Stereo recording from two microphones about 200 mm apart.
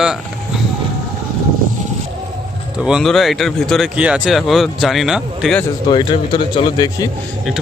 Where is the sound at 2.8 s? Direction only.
5° right (ahead or behind).